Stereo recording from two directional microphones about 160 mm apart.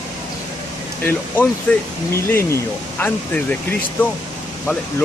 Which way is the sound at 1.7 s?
10° left (ahead or behind).